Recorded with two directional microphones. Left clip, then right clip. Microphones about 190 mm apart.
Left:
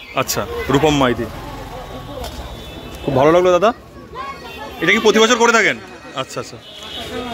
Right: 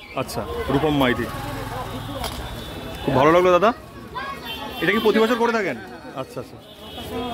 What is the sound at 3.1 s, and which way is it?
Speech, 10° left (ahead or behind).